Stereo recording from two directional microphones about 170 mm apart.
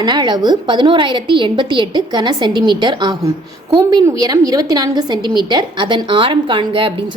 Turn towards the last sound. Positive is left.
turn(degrees=-30)  # may be behind; listen again after turning